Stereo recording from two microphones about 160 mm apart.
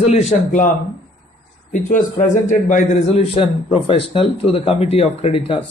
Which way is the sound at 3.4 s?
35° left (ahead or behind).